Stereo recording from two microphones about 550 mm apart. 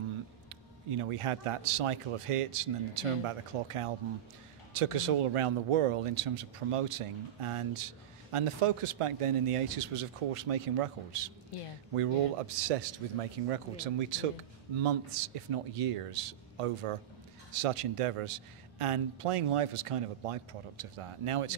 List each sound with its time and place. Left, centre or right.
0.8 s speech: right
11.9 s a man's voice: right
14.8 s speech: right